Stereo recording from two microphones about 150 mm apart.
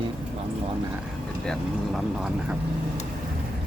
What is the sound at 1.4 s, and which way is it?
Speech, 5° left (ahead or behind).